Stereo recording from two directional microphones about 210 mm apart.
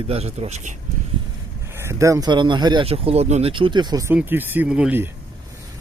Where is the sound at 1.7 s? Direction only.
10° right (ahead or behind).